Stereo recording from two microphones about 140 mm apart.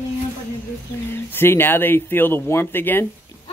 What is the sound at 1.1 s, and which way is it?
Speech, 15° left (ahead or behind).